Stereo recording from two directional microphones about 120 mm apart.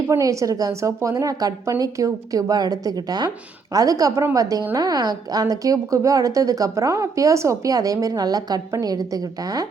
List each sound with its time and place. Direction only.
0.1 s a woman's voice: 25° right (ahead or behind)